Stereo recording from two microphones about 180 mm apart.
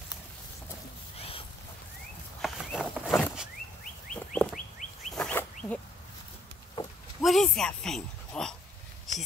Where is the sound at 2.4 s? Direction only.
5° left (ahead or behind).